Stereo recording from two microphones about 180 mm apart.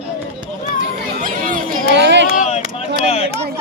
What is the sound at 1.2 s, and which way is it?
Chatter, 50° right (ahead or behind).